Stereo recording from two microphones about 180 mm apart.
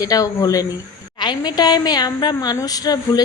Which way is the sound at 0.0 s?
20° left (ahead or behind).